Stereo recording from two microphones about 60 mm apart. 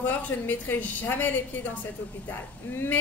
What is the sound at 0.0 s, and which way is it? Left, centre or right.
A woman's voice, left.